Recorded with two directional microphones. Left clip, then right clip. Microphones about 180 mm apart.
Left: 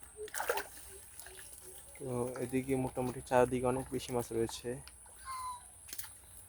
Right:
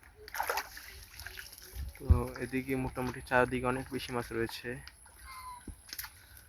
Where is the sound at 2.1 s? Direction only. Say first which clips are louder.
Even; 5° right (ahead or behind).